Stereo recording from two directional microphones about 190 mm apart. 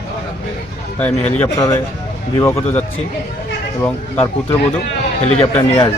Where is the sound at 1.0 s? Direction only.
10° left (ahead or behind).